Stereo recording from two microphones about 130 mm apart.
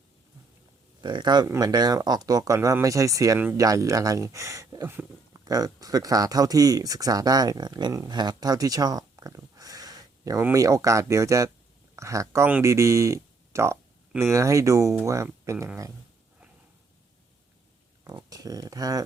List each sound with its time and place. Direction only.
1.0 s speech: 35° right (ahead or behind)
4.9 s speech: 15° right (ahead or behind)
5.5 s speech: 30° right (ahead or behind)
18.0 s speech: 30° right (ahead or behind)